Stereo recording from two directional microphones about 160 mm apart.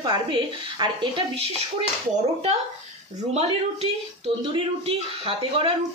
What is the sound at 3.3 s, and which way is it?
Speech, 40° right (ahead or behind).